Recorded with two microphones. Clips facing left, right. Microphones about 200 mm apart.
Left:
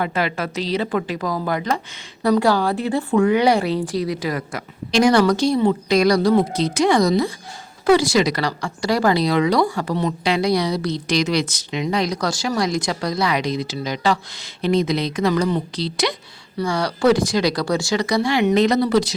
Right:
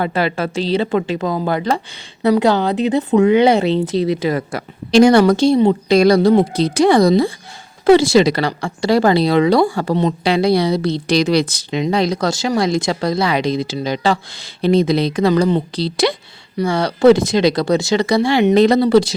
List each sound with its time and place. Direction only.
0.0 s speech: 30° right (ahead or behind)